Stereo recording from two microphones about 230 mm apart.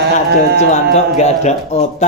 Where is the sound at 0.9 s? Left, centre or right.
Left.